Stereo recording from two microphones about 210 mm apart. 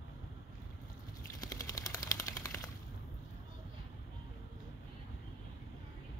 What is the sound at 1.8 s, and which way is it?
Typewriter, 15° left (ahead or behind).